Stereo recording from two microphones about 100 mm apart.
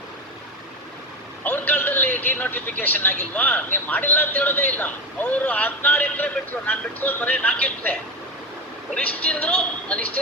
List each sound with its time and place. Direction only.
1.5 s speech: 15° left (ahead or behind)
9.0 s speech: 15° left (ahead or behind)